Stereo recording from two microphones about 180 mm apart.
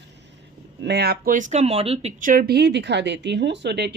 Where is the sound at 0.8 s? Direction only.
65° right (ahead or behind).